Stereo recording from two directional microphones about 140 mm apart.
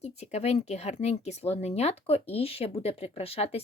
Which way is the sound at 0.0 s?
50° left (ahead or behind).